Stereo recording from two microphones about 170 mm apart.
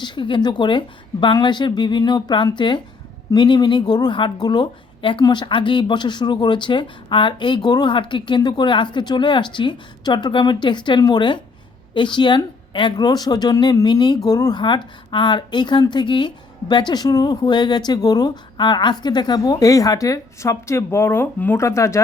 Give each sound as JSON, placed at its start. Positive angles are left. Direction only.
{"t": 0.0, "sound": "a woman's voice", "side_deg": 30}